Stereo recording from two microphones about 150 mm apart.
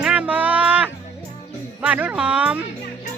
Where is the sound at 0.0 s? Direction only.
10° right (ahead or behind).